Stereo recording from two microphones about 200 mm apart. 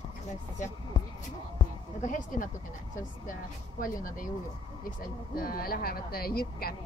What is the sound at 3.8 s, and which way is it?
Speech, 45° left (ahead or behind).